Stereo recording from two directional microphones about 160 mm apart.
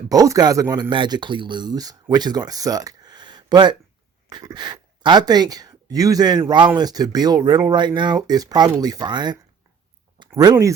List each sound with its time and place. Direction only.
0.1 s speech: 25° right (ahead or behind)